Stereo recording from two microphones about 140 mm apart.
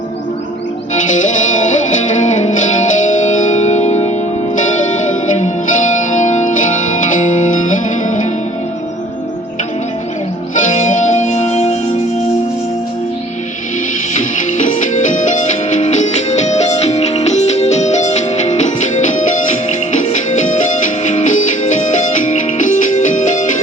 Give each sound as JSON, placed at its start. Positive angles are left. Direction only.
{"t": 1.1, "sound": "music", "side_deg": 65}
{"t": 10.5, "sound": "music", "side_deg": 60}
{"t": 14.2, "sound": "music", "side_deg": 60}